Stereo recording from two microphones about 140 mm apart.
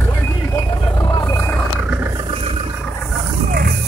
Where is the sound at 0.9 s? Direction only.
25° left (ahead or behind).